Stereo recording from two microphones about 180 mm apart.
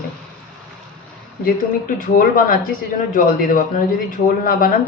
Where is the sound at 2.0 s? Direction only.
50° left (ahead or behind).